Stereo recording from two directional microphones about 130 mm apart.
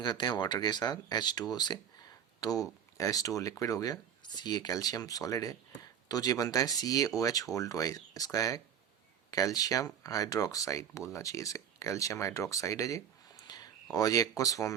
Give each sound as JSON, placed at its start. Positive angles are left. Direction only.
{"t": 0.0, "sound": "speech", "side_deg": 35}